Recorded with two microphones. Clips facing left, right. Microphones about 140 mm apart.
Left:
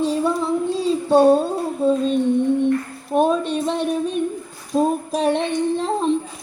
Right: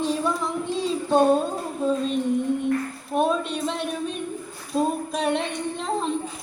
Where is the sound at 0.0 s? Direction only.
35° left (ahead or behind).